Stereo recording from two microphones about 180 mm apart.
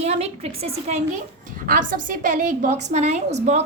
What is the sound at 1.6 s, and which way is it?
A woman's voice, 50° right (ahead or behind).